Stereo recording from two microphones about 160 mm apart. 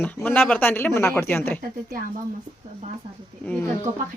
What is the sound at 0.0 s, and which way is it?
Speech, 10° left (ahead or behind).